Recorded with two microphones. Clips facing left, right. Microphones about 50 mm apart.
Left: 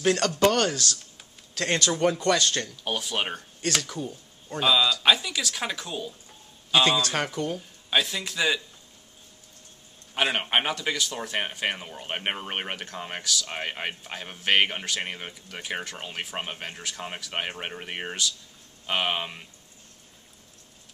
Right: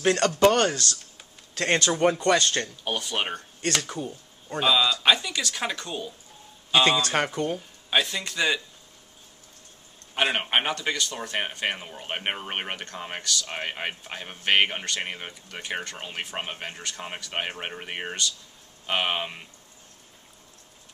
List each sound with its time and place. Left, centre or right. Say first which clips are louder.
0.5 s speech: right 2 dB; centre
2.8 s speech: even; centre
3.8 s speech: right 1 dB; centre
7.9 s speech: right 1 dB; centre
10.1 s speech: even; centre